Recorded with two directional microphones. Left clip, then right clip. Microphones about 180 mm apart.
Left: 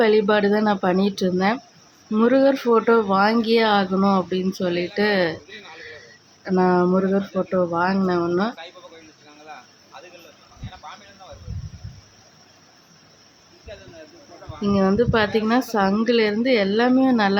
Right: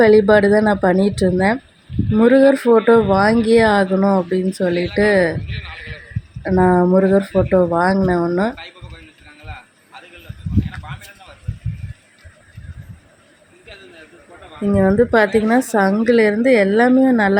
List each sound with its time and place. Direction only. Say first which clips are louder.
0.0 s speech: right 6 dB; 20° right (ahead or behind)
3.9 s speech: right 4 dB; 5° right (ahead or behind)
5.5 s a sound: right 6 dB; 55° left (ahead or behind)
6.5 s speech: right 5 dB; 20° right (ahead or behind)
13.7 s snake: even; 60° left (ahead or behind)
14.7 s speech: right 5 dB; 15° right (ahead or behind)